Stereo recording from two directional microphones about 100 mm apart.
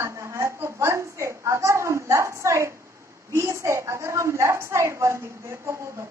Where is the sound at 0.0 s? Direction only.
30° right (ahead or behind).